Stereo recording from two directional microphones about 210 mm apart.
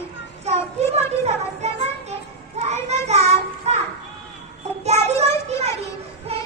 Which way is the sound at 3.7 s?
30° right (ahead or behind).